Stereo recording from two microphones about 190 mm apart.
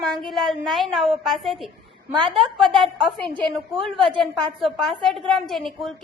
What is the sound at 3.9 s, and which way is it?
Speech, 25° right (ahead or behind).